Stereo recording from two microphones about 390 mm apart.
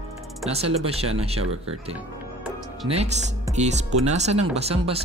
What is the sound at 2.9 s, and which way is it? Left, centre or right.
Speech, centre.